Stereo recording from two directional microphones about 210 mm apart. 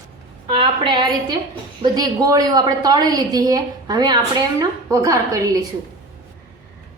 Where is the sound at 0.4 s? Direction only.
20° right (ahead or behind).